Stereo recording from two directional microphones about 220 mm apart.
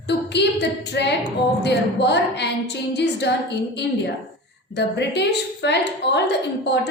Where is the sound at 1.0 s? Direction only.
50° left (ahead or behind).